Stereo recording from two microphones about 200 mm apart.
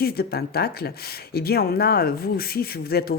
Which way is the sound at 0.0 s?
50° left (ahead or behind).